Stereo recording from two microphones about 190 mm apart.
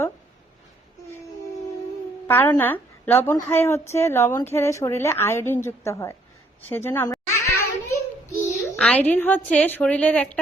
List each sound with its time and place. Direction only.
2.2 s a woman's voice: 10° left (ahead or behind)
7.9 s child singing: 15° left (ahead or behind)
8.7 s a woman's voice: 5° left (ahead or behind)